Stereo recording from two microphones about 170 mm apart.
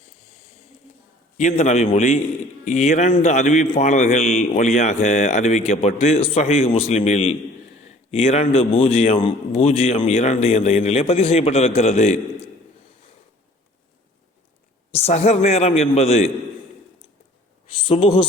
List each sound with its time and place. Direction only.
1.4 s a man's voice: 45° left (ahead or behind)
7.9 s a sound: 40° left (ahead or behind)
8.5 s a man's voice: 35° left (ahead or behind)
14.9 s a man's voice: 40° left (ahead or behind)
17.7 s a man's voice: 35° left (ahead or behind)